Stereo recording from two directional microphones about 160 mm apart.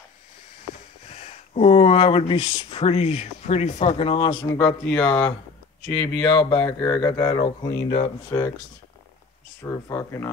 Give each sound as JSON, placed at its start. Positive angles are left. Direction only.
{"t": 1.2, "sound": "speech", "side_deg": 45}
{"t": 4.6, "sound": "speech", "side_deg": 10}
{"t": 7.2, "sound": "speech", "side_deg": 30}
{"t": 9.6, "sound": "speech", "side_deg": 20}